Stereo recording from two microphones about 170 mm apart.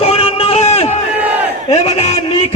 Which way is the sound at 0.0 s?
35° left (ahead or behind).